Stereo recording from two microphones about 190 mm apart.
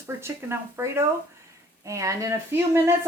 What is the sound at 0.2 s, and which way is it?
Speech, 15° right (ahead or behind).